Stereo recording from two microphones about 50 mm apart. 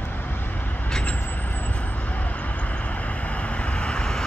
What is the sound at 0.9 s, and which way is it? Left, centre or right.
Vehicle, left.